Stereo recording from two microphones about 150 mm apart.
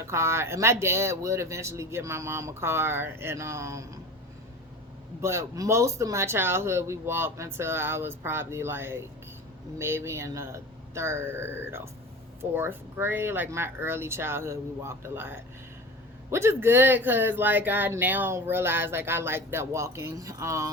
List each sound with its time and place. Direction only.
0.0 s speech: 15° right (ahead or behind)
5.2 s speech: 20° right (ahead or behind)